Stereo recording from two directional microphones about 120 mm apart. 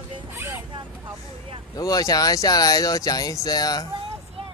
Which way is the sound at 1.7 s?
30° left (ahead or behind).